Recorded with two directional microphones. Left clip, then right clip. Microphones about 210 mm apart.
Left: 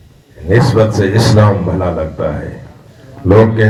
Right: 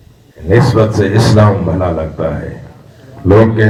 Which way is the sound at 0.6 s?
25° left (ahead or behind).